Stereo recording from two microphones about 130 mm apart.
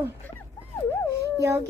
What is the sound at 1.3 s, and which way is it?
Speech, 25° right (ahead or behind).